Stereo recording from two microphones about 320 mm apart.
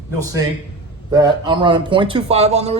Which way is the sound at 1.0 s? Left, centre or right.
Centre.